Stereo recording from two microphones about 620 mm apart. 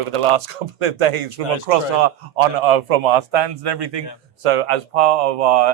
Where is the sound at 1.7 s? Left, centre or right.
Right.